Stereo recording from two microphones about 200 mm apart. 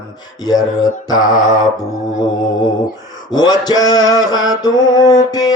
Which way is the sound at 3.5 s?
20° left (ahead or behind).